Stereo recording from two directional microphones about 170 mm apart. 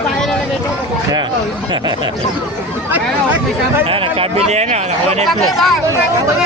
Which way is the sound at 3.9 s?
35° right (ahead or behind).